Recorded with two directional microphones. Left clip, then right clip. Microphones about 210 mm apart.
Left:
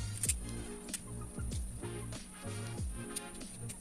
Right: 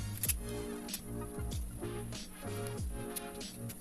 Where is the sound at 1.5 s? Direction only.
Centre (ahead or behind).